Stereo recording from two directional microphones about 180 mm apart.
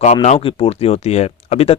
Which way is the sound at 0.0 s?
35° left (ahead or behind).